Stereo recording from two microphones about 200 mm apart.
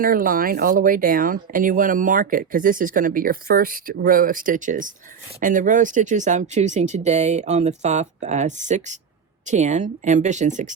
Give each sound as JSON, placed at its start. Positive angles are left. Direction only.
{"t": 0.0, "sound": "speech", "side_deg": -45}